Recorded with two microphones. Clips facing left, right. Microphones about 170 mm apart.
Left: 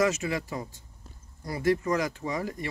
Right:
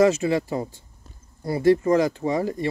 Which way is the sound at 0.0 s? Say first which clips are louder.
Right 8 dB; 30° right (ahead or behind).